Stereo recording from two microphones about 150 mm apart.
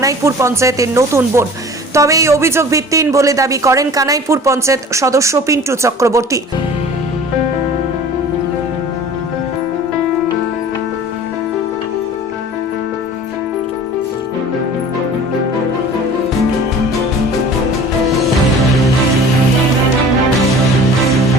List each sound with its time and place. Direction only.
0.0 s a man's voice: 20° right (ahead or behind)